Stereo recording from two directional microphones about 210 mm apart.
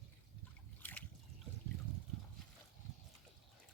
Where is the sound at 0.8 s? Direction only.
5° left (ahead or behind).